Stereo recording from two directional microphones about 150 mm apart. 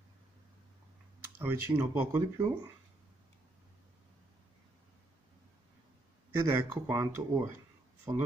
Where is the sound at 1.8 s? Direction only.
20° right (ahead or behind).